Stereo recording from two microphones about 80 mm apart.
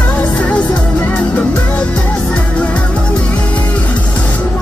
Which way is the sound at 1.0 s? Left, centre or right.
Centre.